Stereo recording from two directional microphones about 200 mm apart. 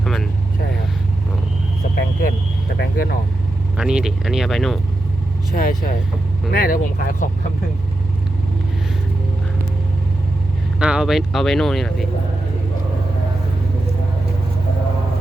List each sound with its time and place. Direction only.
0.0 s vehicle: centre (ahead or behind)
2.7 s vehicle: 55° left (ahead or behind)
3.8 s speech: 5° right (ahead or behind)
5.5 s speech: 45° left (ahead or behind)
10.8 s speech: 5° right (ahead or behind)